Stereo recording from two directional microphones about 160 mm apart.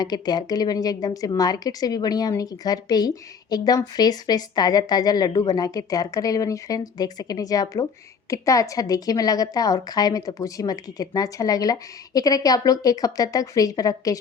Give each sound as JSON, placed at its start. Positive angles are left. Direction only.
{"t": 0.0, "sound": "a woman's voice", "side_deg": 25}